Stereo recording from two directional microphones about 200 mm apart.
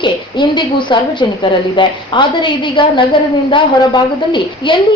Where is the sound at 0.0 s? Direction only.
25° left (ahead or behind).